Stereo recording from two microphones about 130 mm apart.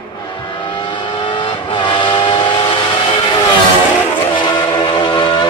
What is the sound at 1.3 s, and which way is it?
Vehicle, 40° left (ahead or behind).